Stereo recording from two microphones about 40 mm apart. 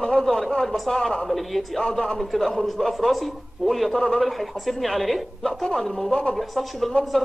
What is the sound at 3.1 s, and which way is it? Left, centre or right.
A woman's voice, centre.